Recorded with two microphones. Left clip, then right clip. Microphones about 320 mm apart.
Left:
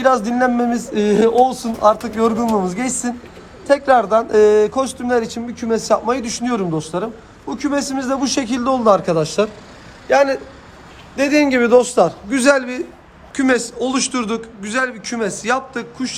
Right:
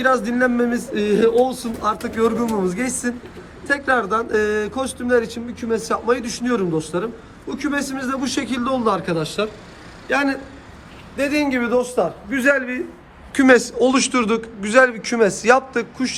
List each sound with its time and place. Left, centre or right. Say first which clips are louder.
0.0 s a man's voice: left 3 dB; centre
13.3 s a man's voice: right 3 dB; centre